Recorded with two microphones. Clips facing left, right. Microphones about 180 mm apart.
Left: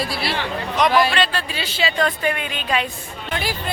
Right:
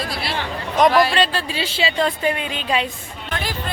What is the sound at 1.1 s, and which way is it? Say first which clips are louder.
A woman's voice: right 2 dB; 30° right (ahead or behind).